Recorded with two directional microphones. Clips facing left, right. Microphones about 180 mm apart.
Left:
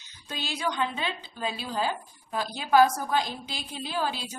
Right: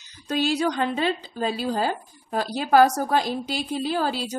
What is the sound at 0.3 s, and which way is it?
A woman's voice, 40° right (ahead or behind).